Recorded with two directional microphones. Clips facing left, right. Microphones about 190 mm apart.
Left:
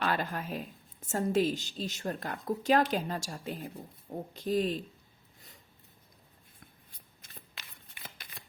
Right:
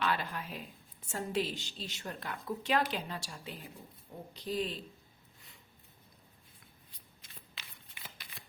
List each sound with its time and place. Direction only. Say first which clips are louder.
0.0 s a sound: left 3 dB; 45° left (ahead or behind)
1.0 s a woman's voice: left 7 dB; 45° left (ahead or behind)
8.0 s scissors: left 3 dB; 50° left (ahead or behind)